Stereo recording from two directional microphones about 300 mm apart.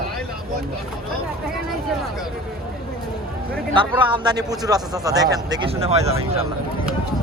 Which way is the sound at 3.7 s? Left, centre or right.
Centre.